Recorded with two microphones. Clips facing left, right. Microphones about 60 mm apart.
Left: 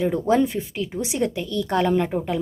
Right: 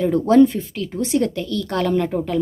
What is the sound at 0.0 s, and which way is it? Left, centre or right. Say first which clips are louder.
Speech: right 6 dB; centre.